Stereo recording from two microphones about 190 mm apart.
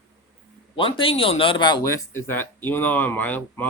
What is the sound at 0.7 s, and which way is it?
Speech, 25° left (ahead or behind).